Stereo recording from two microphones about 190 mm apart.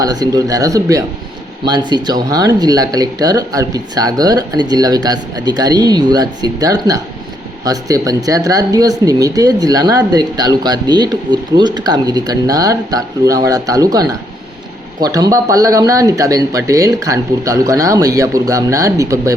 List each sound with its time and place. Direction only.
0.0 s speech: 20° right (ahead or behind)